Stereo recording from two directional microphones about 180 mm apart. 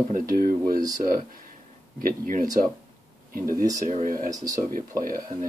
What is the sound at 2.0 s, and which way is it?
Speech, 50° right (ahead or behind).